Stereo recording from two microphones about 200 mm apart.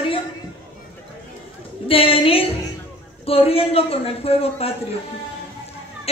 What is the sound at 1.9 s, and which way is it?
A man's voice, 30° left (ahead or behind).